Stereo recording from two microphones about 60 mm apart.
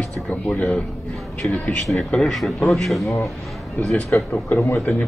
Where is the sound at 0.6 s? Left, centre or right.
Centre.